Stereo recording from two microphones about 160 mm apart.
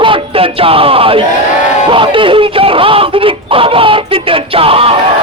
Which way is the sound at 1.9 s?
30° right (ahead or behind).